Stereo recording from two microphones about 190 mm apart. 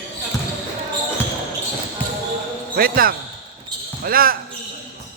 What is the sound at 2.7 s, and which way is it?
Speech, 50° right (ahead or behind).